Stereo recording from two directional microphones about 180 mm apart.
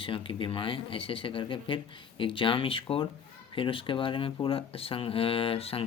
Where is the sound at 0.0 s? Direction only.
30° left (ahead or behind).